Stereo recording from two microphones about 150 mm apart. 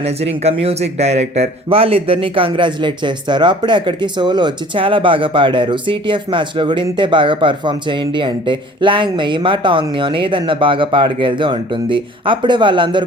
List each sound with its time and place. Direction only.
0.0 s speech: 45° right (ahead or behind)